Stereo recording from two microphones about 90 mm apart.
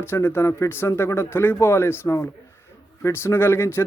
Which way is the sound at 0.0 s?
25° left (ahead or behind).